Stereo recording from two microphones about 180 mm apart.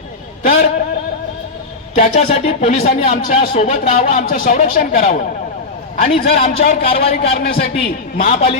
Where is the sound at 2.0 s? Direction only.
35° left (ahead or behind).